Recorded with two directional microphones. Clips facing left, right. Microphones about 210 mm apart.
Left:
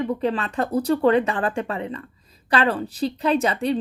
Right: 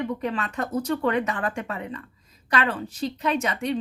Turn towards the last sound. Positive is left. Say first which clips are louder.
# left 5 dB
turn(degrees=35)  # may be behind; listen again after turning